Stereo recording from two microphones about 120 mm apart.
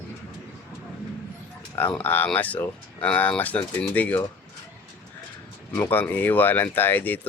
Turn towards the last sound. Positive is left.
turn(degrees=15)  # may be behind; listen again after turning